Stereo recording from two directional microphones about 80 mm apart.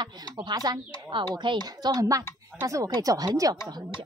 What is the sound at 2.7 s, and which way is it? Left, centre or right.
Speech, right.